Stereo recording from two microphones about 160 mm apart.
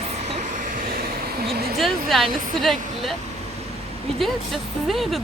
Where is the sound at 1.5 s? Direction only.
75° right (ahead or behind).